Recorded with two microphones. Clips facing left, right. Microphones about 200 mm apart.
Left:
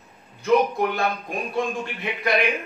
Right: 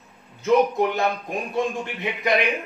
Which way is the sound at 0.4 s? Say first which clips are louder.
Right 1 dB; 20° right (ahead or behind).